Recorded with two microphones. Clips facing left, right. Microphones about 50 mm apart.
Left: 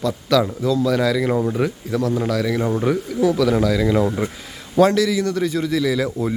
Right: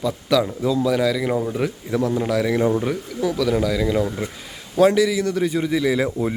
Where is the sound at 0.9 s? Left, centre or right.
Centre.